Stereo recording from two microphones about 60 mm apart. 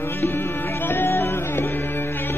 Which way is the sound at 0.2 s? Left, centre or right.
Left.